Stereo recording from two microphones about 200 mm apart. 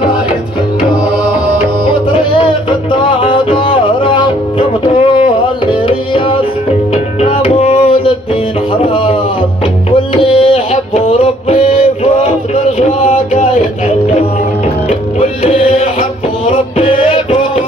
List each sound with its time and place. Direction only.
2.9 s music: 25° left (ahead or behind)
5.7 s tabla: 25° left (ahead or behind)
7.2 s music: 30° left (ahead or behind)
8.8 s a sound: 25° left (ahead or behind)
10.3 s music: 30° left (ahead or behind)